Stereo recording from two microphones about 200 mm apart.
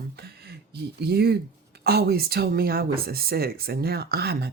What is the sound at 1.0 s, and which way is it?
Speech, 55° right (ahead or behind).